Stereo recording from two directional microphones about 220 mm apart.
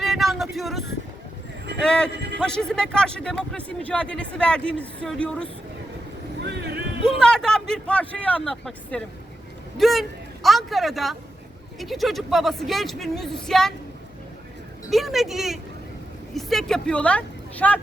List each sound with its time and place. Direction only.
0.0 s vehicle: centre (ahead or behind)
1.8 s a man's voice: 5° left (ahead or behind)
6.4 s vehicle: 50° right (ahead or behind)
7.2 s a man's voice: 5° left (ahead or behind)
14.8 s a man's voice: centre (ahead or behind)